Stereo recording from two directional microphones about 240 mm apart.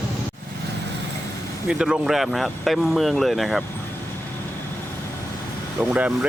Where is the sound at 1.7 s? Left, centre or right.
Centre.